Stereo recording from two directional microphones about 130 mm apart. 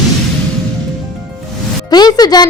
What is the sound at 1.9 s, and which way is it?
Speech, 30° left (ahead or behind).